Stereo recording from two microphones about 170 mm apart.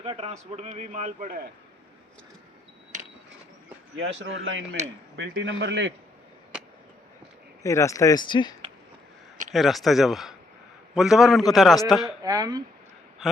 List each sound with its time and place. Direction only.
0.0 s a man's voice: 35° right (ahead or behind); by 1.5 s 50° right (ahead or behind)
4.2 s a man's voice: 90° right
7.6 s speech: 20° left (ahead or behind)
9.5 s speech: centre (ahead or behind)
12.2 s speech: 20° right (ahead or behind)
13.2 s a sound: centre (ahead or behind)